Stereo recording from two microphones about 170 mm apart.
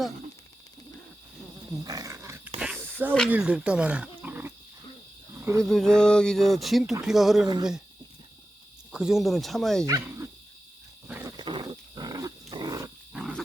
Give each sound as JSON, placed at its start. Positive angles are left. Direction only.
{"t": 1.8, "sound": "wild animals", "side_deg": -20}
{"t": 2.6, "sound": "snake", "side_deg": -10}
{"t": 3.2, "sound": "speech", "side_deg": -10}
{"t": 5.3, "sound": "cricket", "side_deg": -15}
{"t": 5.6, "sound": "speech", "side_deg": 5}
{"t": 8.9, "sound": "speech", "side_deg": -5}
{"t": 9.8, "sound": "speech", "side_deg": -20}
{"t": 11.1, "sound": "wild animals", "side_deg": -20}
{"t": 13.1, "sound": "wild animals", "side_deg": -5}